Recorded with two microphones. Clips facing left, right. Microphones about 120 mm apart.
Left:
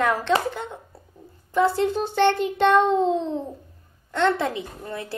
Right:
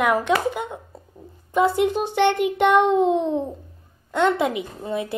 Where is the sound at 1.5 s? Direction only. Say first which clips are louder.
Right 2 dB; 20° right (ahead or behind).